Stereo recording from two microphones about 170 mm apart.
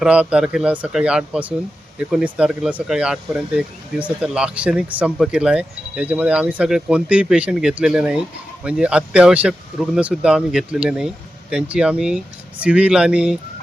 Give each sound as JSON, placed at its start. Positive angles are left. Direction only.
{"t": 0.0, "sound": "speech", "side_deg": -5}